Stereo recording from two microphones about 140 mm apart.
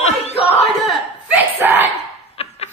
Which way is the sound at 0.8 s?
Centre (ahead or behind).